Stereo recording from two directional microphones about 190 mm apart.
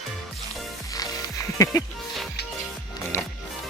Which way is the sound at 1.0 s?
20° left (ahead or behind).